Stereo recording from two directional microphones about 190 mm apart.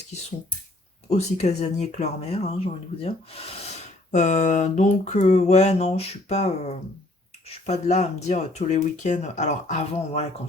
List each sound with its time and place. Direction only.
1.1 s speech: 35° left (ahead or behind)